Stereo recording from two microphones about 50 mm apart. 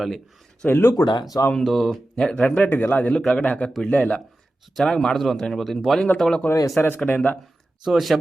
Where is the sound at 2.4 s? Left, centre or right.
Left.